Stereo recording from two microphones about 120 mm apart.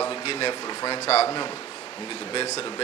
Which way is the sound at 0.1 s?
55° left (ahead or behind).